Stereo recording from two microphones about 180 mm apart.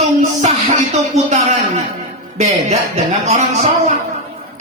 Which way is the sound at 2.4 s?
35° right (ahead or behind).